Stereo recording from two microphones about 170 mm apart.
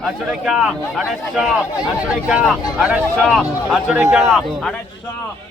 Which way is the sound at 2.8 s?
5° right (ahead or behind).